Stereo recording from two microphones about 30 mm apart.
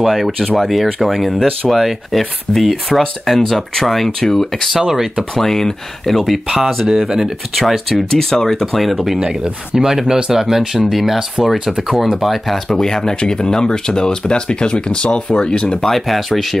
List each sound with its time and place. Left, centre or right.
0.0 s speech: centre
4.2 s speech: centre
4.7 s speech: centre
5.3 s speech: centre
6.0 s speech: centre
7.9 s speech: centre
8.7 s speech: centre
9.8 s speech: centre
12.2 s speech: centre
12.6 s speech: centre; by 15.8 s left
15.8 s speech: centre